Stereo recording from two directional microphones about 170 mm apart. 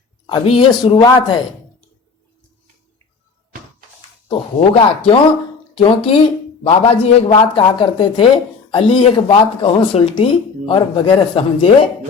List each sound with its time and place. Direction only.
0.3 s speech: 30° left (ahead or behind)
4.3 s a man's voice: 30° left (ahead or behind)